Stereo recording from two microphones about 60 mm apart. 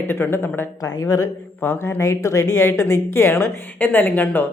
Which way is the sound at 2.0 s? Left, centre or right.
Left.